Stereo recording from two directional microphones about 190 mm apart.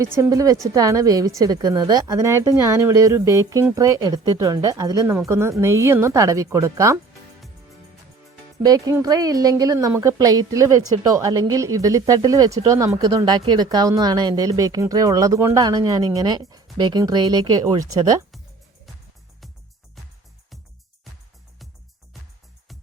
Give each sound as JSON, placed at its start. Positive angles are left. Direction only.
{"t": 0.0, "sound": "speech", "side_deg": -15}
{"t": 8.6, "sound": "speech", "side_deg": -20}